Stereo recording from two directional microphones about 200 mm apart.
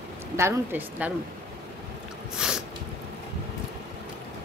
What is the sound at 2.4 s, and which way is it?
Snort, 5° right (ahead or behind).